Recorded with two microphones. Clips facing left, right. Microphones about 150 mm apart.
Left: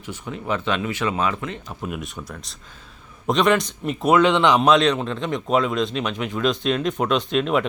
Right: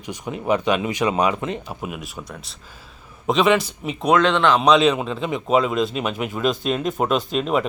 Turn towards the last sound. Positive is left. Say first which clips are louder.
# even
turn(degrees=0)  # may be behind; listen again after turning